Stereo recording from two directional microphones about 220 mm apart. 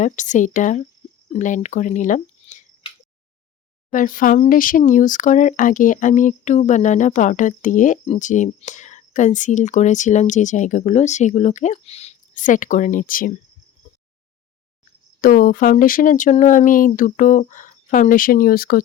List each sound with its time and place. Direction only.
0.0 s speech: 35° left (ahead or behind)
3.9 s speech: 40° left (ahead or behind)
15.2 s speech: 40° left (ahead or behind)